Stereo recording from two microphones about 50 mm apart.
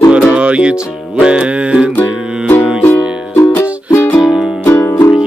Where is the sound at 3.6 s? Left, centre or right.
Left.